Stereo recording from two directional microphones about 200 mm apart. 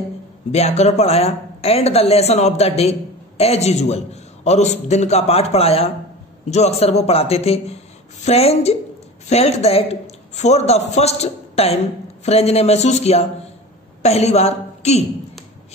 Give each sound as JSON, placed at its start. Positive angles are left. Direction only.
{"t": 0.5, "sound": "speech", "side_deg": 35}